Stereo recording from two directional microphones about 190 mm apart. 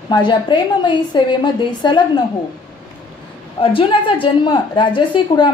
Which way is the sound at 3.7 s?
25° left (ahead or behind).